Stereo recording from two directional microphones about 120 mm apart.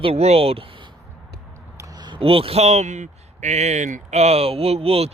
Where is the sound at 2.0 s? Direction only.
45° right (ahead or behind).